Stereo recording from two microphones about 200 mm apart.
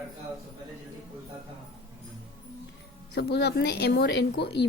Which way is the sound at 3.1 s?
55° left (ahead or behind).